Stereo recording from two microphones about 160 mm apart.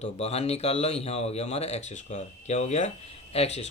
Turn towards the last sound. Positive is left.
turn(degrees=40)  # may be behind; listen again after turning